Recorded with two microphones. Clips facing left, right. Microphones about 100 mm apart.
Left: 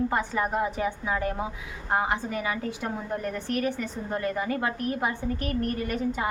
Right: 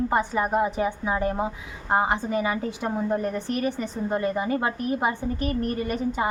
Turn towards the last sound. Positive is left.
turn(degrees=-25)  # may be behind; listen again after turning